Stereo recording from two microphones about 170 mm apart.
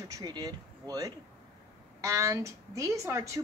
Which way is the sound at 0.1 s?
20° right (ahead or behind).